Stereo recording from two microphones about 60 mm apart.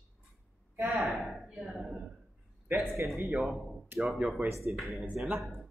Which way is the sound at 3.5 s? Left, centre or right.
Centre.